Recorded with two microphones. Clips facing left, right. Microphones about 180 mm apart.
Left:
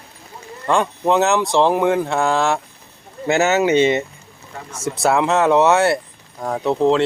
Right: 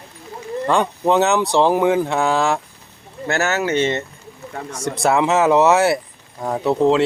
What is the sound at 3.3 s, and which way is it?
Speech, 20° left (ahead or behind).